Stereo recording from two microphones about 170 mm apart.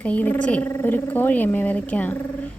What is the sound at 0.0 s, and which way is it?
Speech, 10° left (ahead or behind).